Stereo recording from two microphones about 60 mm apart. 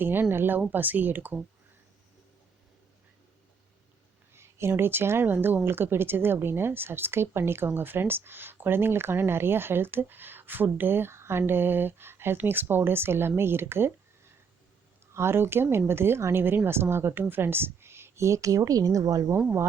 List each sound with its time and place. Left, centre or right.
0.0 s a woman's voice: right
4.4 s a sound: right
4.7 s a woman's voice: right
15.1 s a woman's voice: right